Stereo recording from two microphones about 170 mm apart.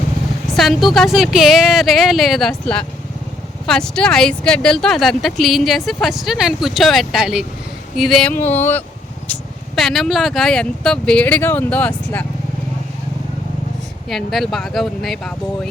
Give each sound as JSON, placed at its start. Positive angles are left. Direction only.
{"t": 0.5, "sound": "speech", "side_deg": 0}
{"t": 7.9, "sound": "a sound", "side_deg": 0}
{"t": 9.2, "sound": "speech", "side_deg": 5}
{"t": 14.1, "sound": "speech", "side_deg": 0}